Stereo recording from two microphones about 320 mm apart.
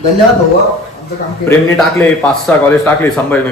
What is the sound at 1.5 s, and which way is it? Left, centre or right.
Speech, centre.